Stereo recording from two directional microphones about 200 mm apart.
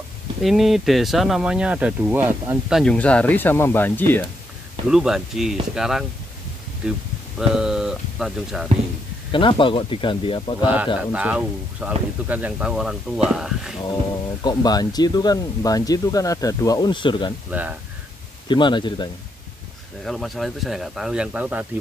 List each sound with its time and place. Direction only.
0.4 s speech: centre (ahead or behind)
2.8 s speech: 5° left (ahead or behind)
4.8 s speech: 5° right (ahead or behind)
7.3 s speech: 5° right (ahead or behind)
9.3 s speech: 25° left (ahead or behind)
10.6 s speech: 10° right (ahead or behind)
13.7 s speech: 20° left (ahead or behind)
17.5 s speech: 10° right (ahead or behind)
18.5 s speech: 25° left (ahead or behind)
20.1 s speech: centre (ahead or behind)